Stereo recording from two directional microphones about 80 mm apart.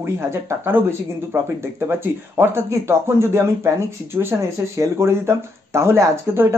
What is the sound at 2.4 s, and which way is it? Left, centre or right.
Speech, right.